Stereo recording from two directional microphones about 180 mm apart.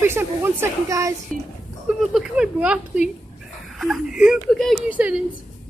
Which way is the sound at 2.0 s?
Centre (ahead or behind).